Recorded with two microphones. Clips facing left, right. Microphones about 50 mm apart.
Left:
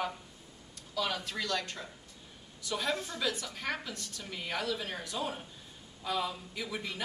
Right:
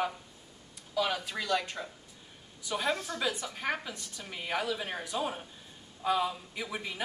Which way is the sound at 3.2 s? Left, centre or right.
Centre.